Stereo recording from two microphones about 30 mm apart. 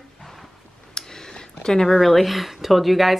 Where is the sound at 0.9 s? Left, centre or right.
Left.